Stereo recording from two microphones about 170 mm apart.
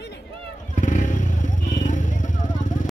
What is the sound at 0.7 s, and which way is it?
Vehicle, 45° left (ahead or behind).